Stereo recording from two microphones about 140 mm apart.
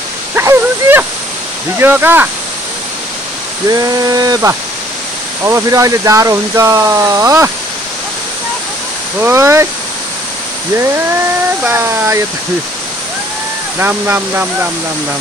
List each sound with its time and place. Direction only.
0.4 s a sound: 15° right (ahead or behind)
1.8 s speech: 15° right (ahead or behind)
3.6 s speech: 25° right (ahead or behind)
9.2 s speech: 20° right (ahead or behind)
11.6 s speech: 15° right (ahead or behind)
13.7 s speech: 15° right (ahead or behind)